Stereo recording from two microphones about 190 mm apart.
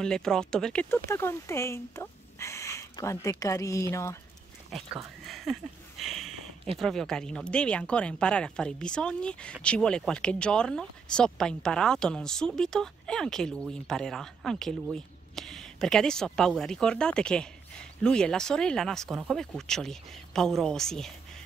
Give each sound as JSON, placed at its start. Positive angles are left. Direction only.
{"t": 0.0, "sound": "speech", "side_deg": 5}
{"t": 4.7, "sound": "a sound", "side_deg": 0}
{"t": 6.8, "sound": "speech", "side_deg": 0}